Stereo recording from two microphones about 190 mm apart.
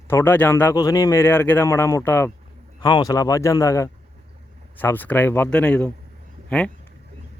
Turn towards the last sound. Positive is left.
turn(degrees=5)  # may be behind; listen again after turning